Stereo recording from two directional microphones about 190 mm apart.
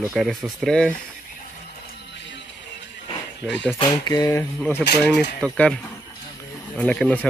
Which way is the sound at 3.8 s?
20° left (ahead or behind).